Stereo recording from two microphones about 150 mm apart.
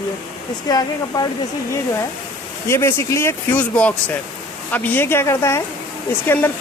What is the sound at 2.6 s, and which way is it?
Speech, 15° left (ahead or behind).